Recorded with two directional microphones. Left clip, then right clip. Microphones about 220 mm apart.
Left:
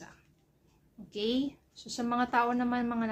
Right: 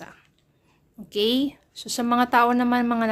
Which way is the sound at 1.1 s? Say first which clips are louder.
Right 10 dB; 50° right (ahead or behind).